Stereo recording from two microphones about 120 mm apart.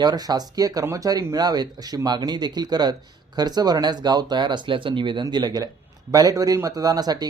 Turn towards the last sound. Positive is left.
turn(degrees=-35)  # may be behind; listen again after turning